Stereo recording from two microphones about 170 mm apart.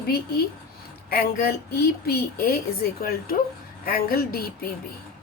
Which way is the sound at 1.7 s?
65° left (ahead or behind).